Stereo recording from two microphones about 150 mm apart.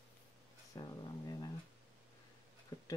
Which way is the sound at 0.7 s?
25° left (ahead or behind).